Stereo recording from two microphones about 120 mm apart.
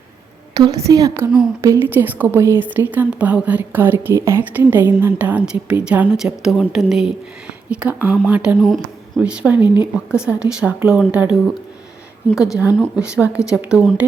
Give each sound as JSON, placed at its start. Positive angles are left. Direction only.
{"t": 0.5, "sound": "a woman's voice", "side_deg": -30}
{"t": 8.5, "sound": "speech", "side_deg": 5}
{"t": 9.2, "sound": "a woman's voice", "side_deg": -10}